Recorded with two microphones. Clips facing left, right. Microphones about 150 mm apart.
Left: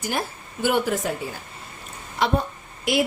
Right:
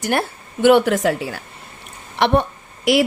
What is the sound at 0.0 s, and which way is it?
A woman's voice, 65° right (ahead or behind).